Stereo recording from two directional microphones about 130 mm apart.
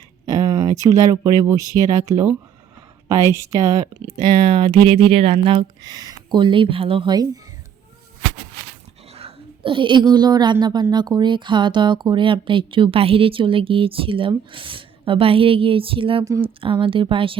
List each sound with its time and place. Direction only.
0.3 s a woman's voice: 30° right (ahead or behind)
4.2 s speech: 40° right (ahead or behind)
9.1 s a woman's voice: 45° right (ahead or behind)
16.2 s a woman's voice: 25° right (ahead or behind)
16.6 s speech: 40° right (ahead or behind)